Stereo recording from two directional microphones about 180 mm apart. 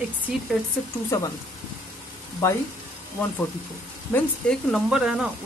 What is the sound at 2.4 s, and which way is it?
Speech, 15° left (ahead or behind).